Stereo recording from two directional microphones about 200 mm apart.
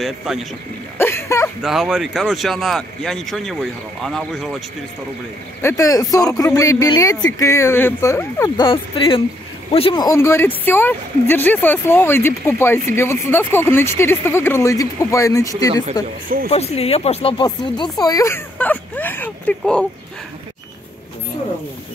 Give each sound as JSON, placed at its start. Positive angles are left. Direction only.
{"t": 0.0, "sound": "speech", "side_deg": 0}
{"t": 0.9, "sound": "a sound", "side_deg": 10}
{"t": 1.6, "sound": "speech", "side_deg": 0}
{"t": 5.6, "sound": "speech", "side_deg": 15}
{"t": 8.6, "sound": "speech", "side_deg": 25}
{"t": 16.4, "sound": "speech", "side_deg": 30}